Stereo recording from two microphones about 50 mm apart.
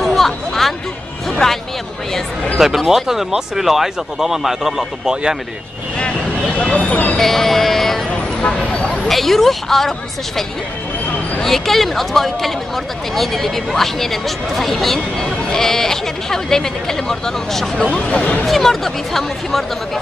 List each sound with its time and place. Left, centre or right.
0.0 s a sound: centre
2.6 s speech: centre
6.6 s speech: left
7.2 s speech: centre
8.1 s speech: left
9.1 s speech: centre
11.4 s speech: centre
17.9 s speech: left
18.4 s speech: centre